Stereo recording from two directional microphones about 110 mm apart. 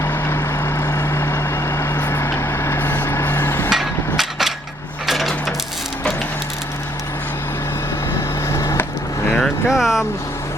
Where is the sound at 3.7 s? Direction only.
Centre (ahead or behind).